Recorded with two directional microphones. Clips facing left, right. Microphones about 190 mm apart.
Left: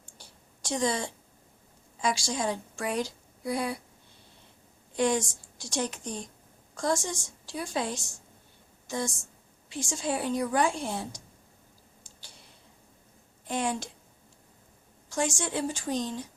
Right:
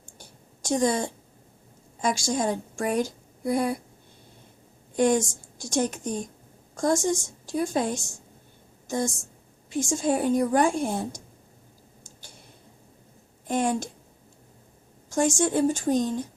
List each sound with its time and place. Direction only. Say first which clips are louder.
0.2 s a sound: right 4 dB; 45° right (ahead or behind)
2.0 s a woman's voice: right 4 dB; 45° right (ahead or behind)
4.9 s speech: right 5 dB; 45° right (ahead or behind)
12.0 s clicking: right 4 dB; 45° right (ahead or behind)
13.5 s speech: right 5 dB; 45° right (ahead or behind)
15.1 s speech: right 7 dB; 45° right (ahead or behind)